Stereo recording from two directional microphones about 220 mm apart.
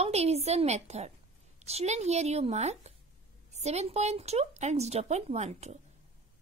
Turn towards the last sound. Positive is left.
turn(degrees=-30)  # may be behind; listen again after turning